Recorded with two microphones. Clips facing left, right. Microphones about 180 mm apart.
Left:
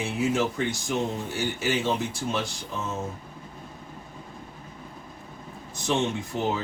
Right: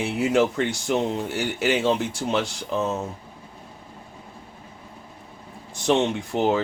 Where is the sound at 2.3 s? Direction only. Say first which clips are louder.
Right 6 dB; 70° right (ahead or behind).